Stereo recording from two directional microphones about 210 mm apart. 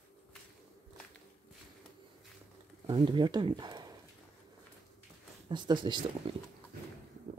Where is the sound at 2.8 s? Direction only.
25° right (ahead or behind).